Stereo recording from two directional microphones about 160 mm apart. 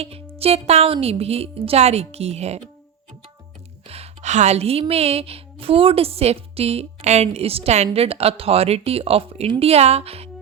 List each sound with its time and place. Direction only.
0.0 s a woman's voice: 40° right (ahead or behind)
3.8 s a woman's voice: 40° right (ahead or behind)